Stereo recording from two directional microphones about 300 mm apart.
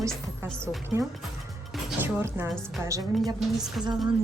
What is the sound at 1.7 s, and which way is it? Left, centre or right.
Speech, centre.